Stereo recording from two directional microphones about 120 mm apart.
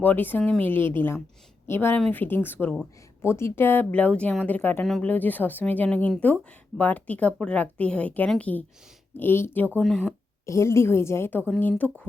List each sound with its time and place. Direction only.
0.0 s speech: 15° left (ahead or behind)
9.8 s speech: 5° left (ahead or behind)
10.4 s a woman's voice: 25° left (ahead or behind)